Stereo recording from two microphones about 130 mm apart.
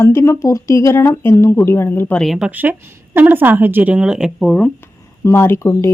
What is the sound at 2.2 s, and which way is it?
A woman's voice, 5° right (ahead or behind).